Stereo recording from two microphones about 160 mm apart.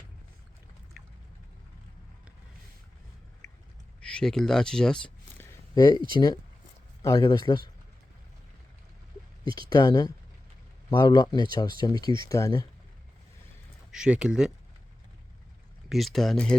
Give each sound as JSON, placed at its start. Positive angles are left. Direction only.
{"t": 4.0, "sound": "speech", "side_deg": 5}
{"t": 5.7, "sound": "speech", "side_deg": 25}
{"t": 7.0, "sound": "speech", "side_deg": 25}
{"t": 9.6, "sound": "speech", "side_deg": 25}
{"t": 13.9, "sound": "speech", "side_deg": -5}
{"t": 15.9, "sound": "speech", "side_deg": 0}